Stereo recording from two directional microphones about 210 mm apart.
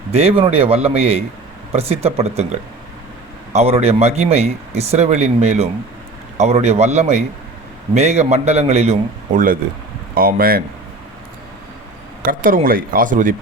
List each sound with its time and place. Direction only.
0.1 s speech: 30° right (ahead or behind)
3.5 s speech: 30° right (ahead or behind)
12.2 s speech: 40° right (ahead or behind)